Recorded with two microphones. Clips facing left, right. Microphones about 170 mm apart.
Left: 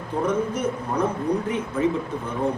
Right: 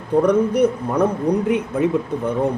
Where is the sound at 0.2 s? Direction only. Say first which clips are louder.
Right 8 dB; 65° right (ahead or behind).